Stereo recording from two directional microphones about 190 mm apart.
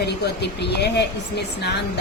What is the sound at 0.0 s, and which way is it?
A woman's voice, 60° left (ahead or behind).